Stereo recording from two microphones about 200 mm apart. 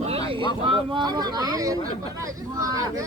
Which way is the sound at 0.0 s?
30° right (ahead or behind).